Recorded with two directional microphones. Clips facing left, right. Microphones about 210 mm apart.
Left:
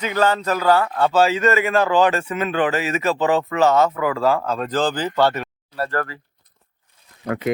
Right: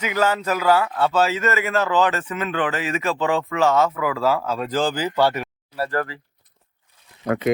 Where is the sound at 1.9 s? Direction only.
15° left (ahead or behind).